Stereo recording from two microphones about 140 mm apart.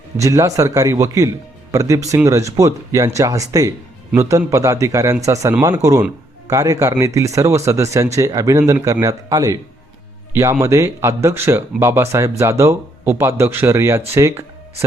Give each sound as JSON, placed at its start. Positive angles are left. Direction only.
{"t": 0.2, "sound": "speech", "side_deg": -25}
{"t": 10.6, "sound": "speech", "side_deg": -20}